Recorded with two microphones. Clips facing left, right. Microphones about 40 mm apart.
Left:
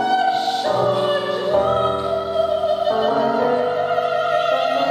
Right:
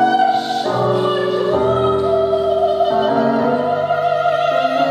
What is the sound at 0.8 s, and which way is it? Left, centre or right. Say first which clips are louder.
Opera: right 2 dB; centre.